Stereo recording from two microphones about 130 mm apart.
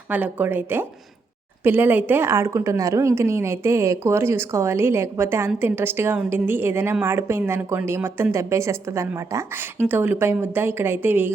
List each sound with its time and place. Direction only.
0.1 s a woman's voice: 15° right (ahead or behind)